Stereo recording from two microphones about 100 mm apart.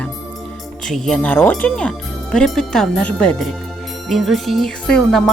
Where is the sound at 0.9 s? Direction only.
Centre (ahead or behind).